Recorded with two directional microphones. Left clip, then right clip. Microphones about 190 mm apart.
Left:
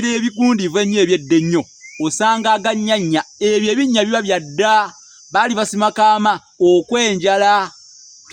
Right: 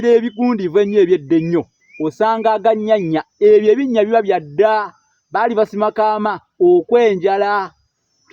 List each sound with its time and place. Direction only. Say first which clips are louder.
0.0 s speech: right 5 dB; 20° left (ahead or behind)